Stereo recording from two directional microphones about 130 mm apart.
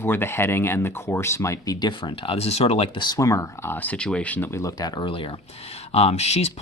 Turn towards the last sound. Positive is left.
turn(degrees=55)  # may be behind; listen again after turning